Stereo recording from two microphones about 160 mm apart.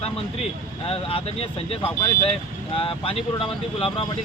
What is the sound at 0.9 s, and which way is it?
Speech, 35° left (ahead or behind).